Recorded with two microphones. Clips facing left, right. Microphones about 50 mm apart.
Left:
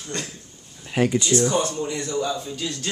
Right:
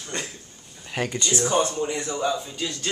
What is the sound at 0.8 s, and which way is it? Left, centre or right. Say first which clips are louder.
Speech: left 6 dB; centre.